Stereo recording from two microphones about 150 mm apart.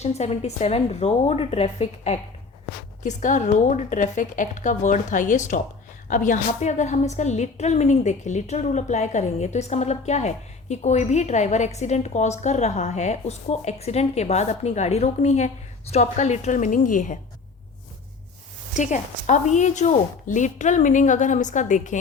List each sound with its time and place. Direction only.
0.0 s a woman's voice: 45° left (ahead or behind)
3.0 s a woman's voice: 55° left (ahead or behind)
18.7 s a woman's voice: 55° left (ahead or behind)